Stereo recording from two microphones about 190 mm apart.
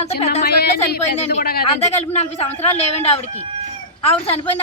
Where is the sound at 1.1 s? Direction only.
35° left (ahead or behind).